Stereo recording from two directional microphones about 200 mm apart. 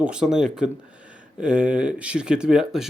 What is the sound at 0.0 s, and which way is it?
Speech, 5° right (ahead or behind).